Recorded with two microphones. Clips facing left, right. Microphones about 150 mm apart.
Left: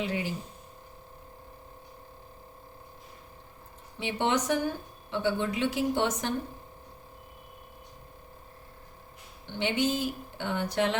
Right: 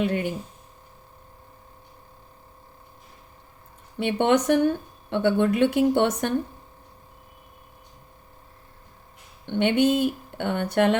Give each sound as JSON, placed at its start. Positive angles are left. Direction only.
{"t": 0.0, "sound": "speech", "side_deg": -60}
{"t": 4.0, "sound": "speech", "side_deg": -60}
{"t": 9.5, "sound": "speech", "side_deg": -60}